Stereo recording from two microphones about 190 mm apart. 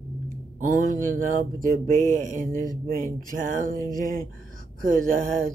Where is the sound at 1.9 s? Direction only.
45° right (ahead or behind).